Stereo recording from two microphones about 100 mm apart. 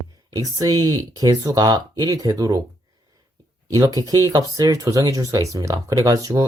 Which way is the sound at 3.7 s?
40° right (ahead or behind).